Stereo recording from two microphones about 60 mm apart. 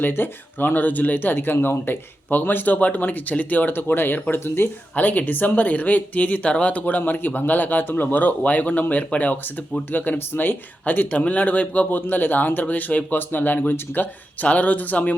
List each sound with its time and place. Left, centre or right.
0.0 s speech: left
4.9 s speech: left